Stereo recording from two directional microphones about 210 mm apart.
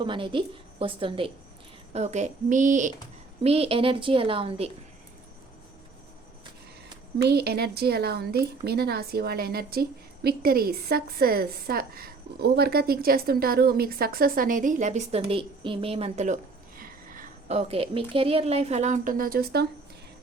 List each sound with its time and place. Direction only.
0.0 s a woman's voice: 25° right (ahead or behind)
7.2 s a woman's voice: 50° right (ahead or behind); by 15.2 s 35° right (ahead or behind)
15.3 s a sound: 25° right (ahead or behind)
18.1 s a woman's voice: 25° right (ahead or behind); by 19.6 s 45° right (ahead or behind)